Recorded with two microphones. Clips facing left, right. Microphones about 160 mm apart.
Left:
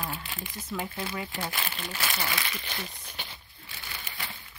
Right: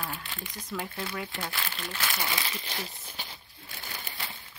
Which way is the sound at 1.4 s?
20° left (ahead or behind).